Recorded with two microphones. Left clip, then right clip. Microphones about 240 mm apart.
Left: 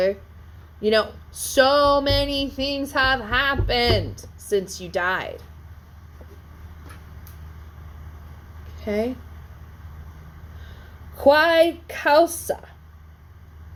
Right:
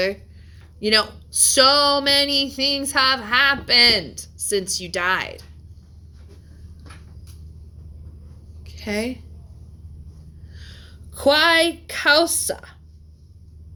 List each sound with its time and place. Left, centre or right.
0.8 s speech: right
8.7 s a sound: right
10.6 s a woman's voice: right